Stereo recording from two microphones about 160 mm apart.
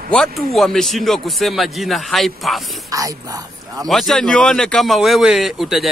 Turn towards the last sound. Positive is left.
turn(degrees=0)  # may be behind; listen again after turning